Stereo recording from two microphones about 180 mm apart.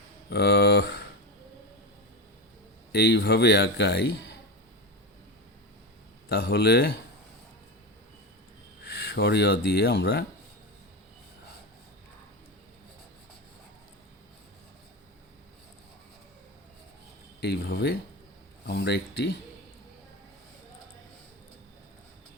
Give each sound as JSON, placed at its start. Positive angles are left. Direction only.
{"t": 0.3, "sound": "speech", "side_deg": 70}
{"t": 2.9, "sound": "speech", "side_deg": 65}
{"t": 6.2, "sound": "a man's voice", "side_deg": 60}
{"t": 8.8, "sound": "speech", "side_deg": 65}
{"t": 17.4, "sound": "speech", "side_deg": 65}